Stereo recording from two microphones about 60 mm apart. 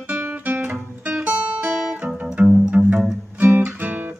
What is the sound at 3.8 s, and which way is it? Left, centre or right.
Music, right.